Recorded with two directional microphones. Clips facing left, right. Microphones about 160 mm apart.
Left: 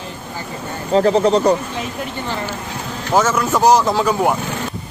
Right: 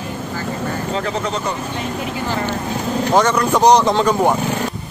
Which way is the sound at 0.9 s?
35° left (ahead or behind).